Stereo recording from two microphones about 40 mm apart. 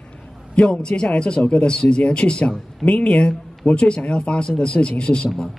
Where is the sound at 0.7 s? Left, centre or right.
Left.